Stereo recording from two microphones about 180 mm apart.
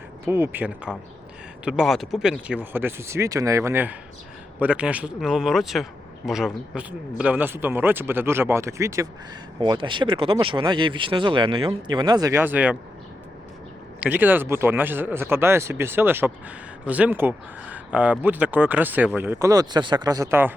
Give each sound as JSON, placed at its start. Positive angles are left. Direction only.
{"t": 0.3, "sound": "speech", "side_deg": -10}
{"t": 9.6, "sound": "speech", "side_deg": -25}
{"t": 14.0, "sound": "speech", "side_deg": -10}